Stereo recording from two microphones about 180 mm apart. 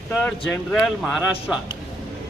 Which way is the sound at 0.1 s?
Centre (ahead or behind).